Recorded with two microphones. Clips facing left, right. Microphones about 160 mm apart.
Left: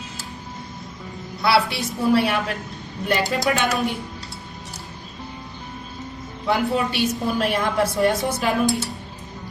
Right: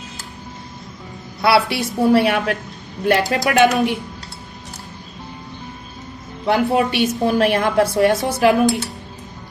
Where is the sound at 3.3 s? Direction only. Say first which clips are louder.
Right 3 dB; 75° right (ahead or behind).